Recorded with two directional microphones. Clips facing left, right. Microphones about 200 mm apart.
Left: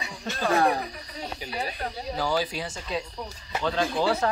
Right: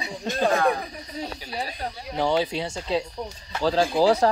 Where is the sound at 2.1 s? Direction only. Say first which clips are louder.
Right 5 dB; 25° right (ahead or behind).